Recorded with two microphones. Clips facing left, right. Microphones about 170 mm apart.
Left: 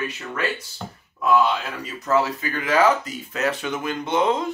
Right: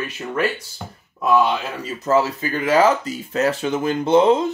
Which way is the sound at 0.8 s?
5° right (ahead or behind).